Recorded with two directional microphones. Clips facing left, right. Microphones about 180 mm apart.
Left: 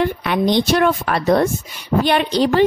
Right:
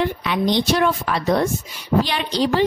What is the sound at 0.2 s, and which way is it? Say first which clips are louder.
A woman's voice: left 3 dB; 55° left (ahead or behind).